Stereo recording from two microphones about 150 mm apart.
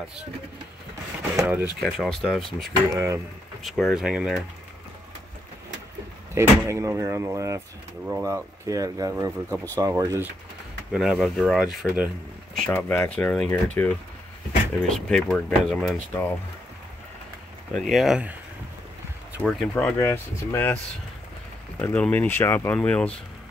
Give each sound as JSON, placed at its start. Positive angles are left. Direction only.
{"t": 1.4, "sound": "speech", "side_deg": -10}
{"t": 1.8, "sound": "speech", "side_deg": 0}
{"t": 2.9, "sound": "speech", "side_deg": -20}
{"t": 3.6, "sound": "speech", "side_deg": 0}
{"t": 6.3, "sound": "speech", "side_deg": -20}
{"t": 10.9, "sound": "speech", "side_deg": -5}
{"t": 12.6, "sound": "speech", "side_deg": 10}
{"t": 16.1, "sound": "speech", "side_deg": 10}
{"t": 17.7, "sound": "speech", "side_deg": 0}
{"t": 19.7, "sound": "speech", "side_deg": 15}